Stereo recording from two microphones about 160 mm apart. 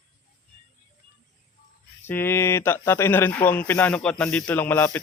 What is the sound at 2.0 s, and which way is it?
Speech, 15° left (ahead or behind).